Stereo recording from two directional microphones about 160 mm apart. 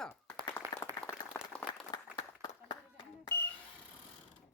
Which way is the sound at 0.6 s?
15° right (ahead or behind).